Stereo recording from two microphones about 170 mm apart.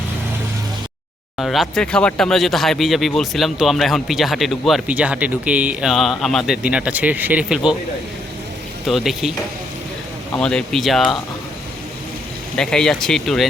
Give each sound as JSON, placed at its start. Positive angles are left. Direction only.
{"t": 1.4, "sound": "speech", "side_deg": 0}
{"t": 8.9, "sound": "speech", "side_deg": 0}
{"t": 10.3, "sound": "speech", "side_deg": 5}
{"t": 12.5, "sound": "speech", "side_deg": 5}